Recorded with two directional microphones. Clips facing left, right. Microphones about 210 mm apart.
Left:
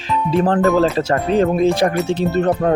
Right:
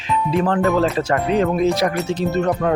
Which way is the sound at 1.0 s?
25° left (ahead or behind).